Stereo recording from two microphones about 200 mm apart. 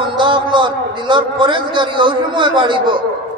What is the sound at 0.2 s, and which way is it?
A man's voice, 25° right (ahead or behind).